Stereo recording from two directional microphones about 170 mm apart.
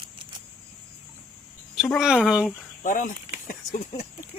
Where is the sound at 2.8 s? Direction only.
50° left (ahead or behind).